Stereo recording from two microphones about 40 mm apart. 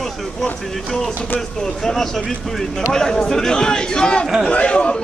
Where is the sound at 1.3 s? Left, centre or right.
Centre.